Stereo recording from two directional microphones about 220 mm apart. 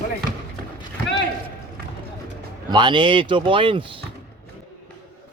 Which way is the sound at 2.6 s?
20° right (ahead or behind).